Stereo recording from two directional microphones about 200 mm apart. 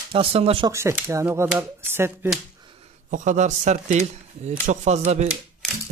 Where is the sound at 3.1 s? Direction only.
40° right (ahead or behind).